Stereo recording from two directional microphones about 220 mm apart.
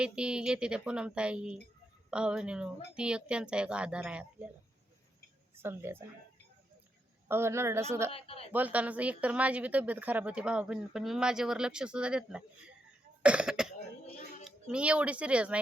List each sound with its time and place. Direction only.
0.0 s speech: 5° right (ahead or behind)
5.6 s a woman's voice: 10° right (ahead or behind)
7.3 s a woman's voice: 10° right (ahead or behind)
8.1 s speech: 25° left (ahead or behind)
8.5 s speech: 5° right (ahead or behind)